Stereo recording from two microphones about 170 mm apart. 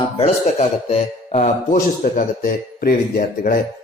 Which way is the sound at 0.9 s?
40° left (ahead or behind).